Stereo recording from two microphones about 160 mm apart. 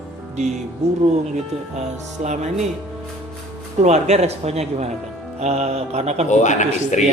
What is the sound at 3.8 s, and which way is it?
Speech, 45° right (ahead or behind).